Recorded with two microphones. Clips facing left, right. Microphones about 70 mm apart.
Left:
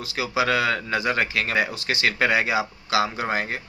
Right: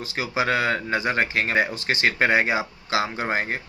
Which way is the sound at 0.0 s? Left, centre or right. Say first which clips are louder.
Left 1 dB; right.